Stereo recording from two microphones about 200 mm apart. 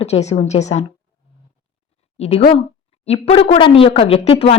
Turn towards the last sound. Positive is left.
turn(degrees=30)  # may be behind; listen again after turning